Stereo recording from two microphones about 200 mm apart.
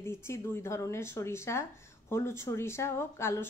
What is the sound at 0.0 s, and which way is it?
A woman's voice, 10° left (ahead or behind).